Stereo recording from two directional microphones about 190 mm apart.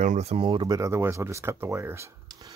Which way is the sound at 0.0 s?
35° right (ahead or behind).